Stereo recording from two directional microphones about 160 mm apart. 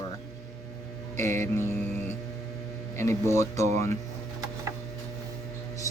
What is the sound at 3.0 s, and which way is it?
Speech, 15° left (ahead or behind).